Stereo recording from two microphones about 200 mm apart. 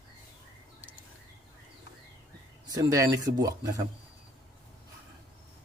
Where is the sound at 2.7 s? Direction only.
15° right (ahead or behind).